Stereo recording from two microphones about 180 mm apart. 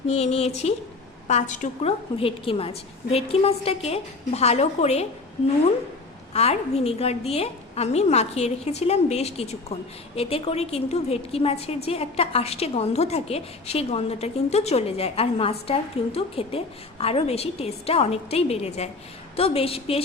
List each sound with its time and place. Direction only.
0.1 s a woman's voice: 35° left (ahead or behind)
6.3 s a woman's voice: 35° left (ahead or behind)